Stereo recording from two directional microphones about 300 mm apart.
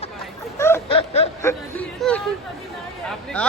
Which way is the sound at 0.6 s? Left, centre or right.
Centre.